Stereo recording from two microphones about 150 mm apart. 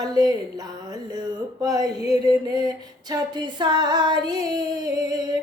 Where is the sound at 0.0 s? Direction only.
25° right (ahead or behind).